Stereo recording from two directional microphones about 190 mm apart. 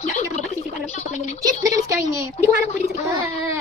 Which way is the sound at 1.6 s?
15° right (ahead or behind).